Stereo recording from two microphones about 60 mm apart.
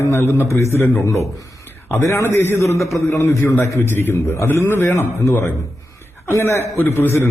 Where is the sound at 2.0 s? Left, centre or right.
Left.